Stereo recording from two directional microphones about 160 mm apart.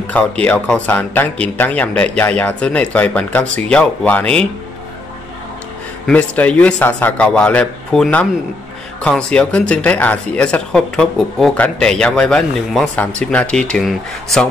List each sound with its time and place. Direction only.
0.0 s speech: 10° left (ahead or behind)
6.0 s speech: 10° left (ahead or behind)